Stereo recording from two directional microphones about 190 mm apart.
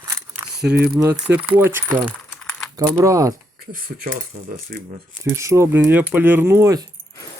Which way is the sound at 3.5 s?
50° right (ahead or behind).